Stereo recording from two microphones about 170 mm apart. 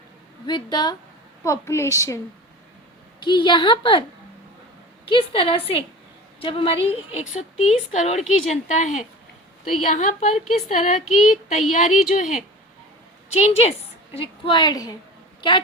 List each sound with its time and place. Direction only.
0.4 s a woman's voice: 25° left (ahead or behind)
3.2 s a woman's voice: 25° left (ahead or behind)
5.0 s a woman's voice: 30° left (ahead or behind)
7.3 s a woman's voice: 45° left (ahead or behind); by 15.6 s 30° left (ahead or behind)